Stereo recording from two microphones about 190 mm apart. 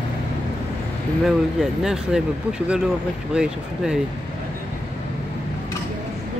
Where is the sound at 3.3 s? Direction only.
5° right (ahead or behind).